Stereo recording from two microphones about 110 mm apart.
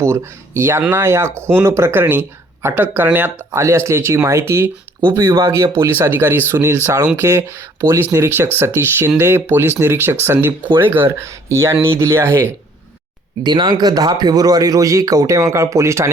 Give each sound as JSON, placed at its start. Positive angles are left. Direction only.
{"t": 0.0, "sound": "speech", "side_deg": -25}
{"t": 3.6, "sound": "speech", "side_deg": -25}
{"t": 13.4, "sound": "speech", "side_deg": -40}